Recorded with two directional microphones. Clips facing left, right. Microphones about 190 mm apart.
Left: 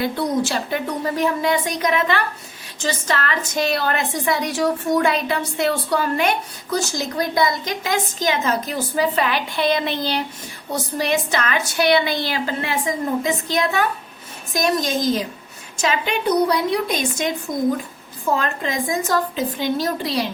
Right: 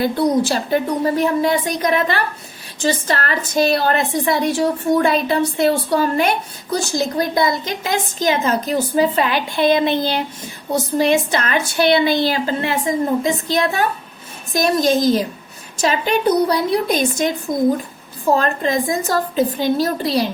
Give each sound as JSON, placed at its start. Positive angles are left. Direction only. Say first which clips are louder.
{"t": 0.2, "sound": "a woman's voice", "louder": "right 5 dB", "side_deg": -35}
{"t": 18.3, "sound": "a woman's voice", "louder": "right 5 dB", "side_deg": -35}